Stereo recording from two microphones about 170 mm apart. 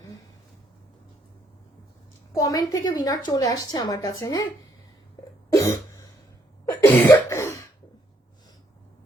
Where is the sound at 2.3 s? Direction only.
20° left (ahead or behind).